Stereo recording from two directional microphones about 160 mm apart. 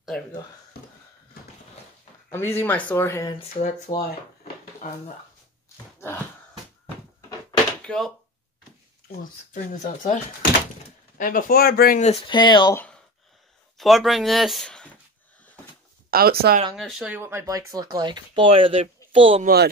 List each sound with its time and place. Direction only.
2.3 s speech: 15° left (ahead or behind)
3.5 s speech: 55° left (ahead or behind)
7.8 s a sound: 5° left (ahead or behind)
9.1 s speech: 55° left (ahead or behind)
11.1 s speech: 60° left (ahead or behind)
12.0 s speech: 45° left (ahead or behind)
12.3 s speech: 30° left (ahead or behind)
12.7 s a sound: 10° left (ahead or behind)
13.7 s speech: centre (ahead or behind)
16.1 s speech: 70° right (ahead or behind)
16.7 s speech: 5° right (ahead or behind); by 19.4 s 35° right (ahead or behind)
19.4 s speech: 80° right